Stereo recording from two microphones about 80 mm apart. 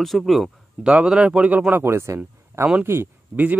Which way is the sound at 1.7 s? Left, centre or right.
Right.